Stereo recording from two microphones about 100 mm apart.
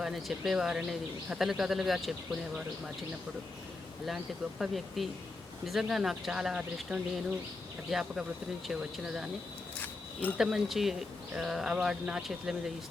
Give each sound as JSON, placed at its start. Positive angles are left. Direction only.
{"t": 0.0, "sound": "speech", "side_deg": 0}
{"t": 4.0, "sound": "speech", "side_deg": -5}
{"t": 9.8, "sound": "a sound", "side_deg": 15}
{"t": 10.3, "sound": "speech", "side_deg": -5}